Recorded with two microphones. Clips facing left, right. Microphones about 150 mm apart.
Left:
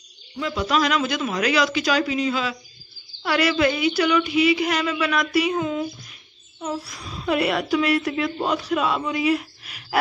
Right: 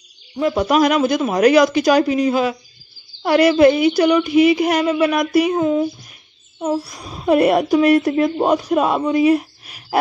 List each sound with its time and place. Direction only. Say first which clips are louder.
0.4 s a woman's voice: right 7 dB; 45° right (ahead or behind)